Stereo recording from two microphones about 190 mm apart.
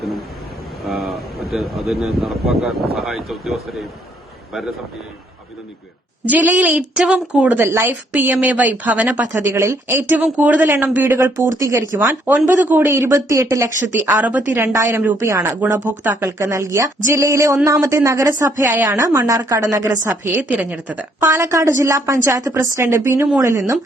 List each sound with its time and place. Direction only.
0.9 s speech: centre (ahead or behind)
6.2 s a woman's voice: 10° right (ahead or behind)